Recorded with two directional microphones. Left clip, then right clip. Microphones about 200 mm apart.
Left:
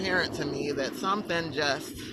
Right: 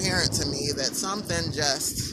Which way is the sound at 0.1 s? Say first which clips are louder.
Left 1 dB; 10° right (ahead or behind).